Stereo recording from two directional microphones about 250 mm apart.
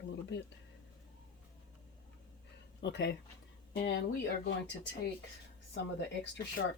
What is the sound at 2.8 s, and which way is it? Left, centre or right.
Speech, left.